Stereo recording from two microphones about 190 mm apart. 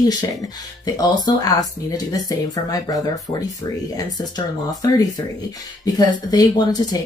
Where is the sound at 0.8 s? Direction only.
20° left (ahead or behind).